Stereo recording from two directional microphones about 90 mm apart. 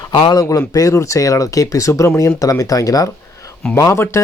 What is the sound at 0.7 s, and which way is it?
Speech, 40° left (ahead or behind).